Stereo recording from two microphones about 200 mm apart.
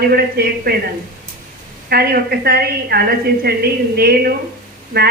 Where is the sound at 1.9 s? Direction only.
50° right (ahead or behind).